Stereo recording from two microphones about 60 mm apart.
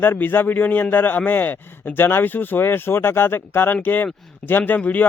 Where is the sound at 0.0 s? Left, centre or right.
Left.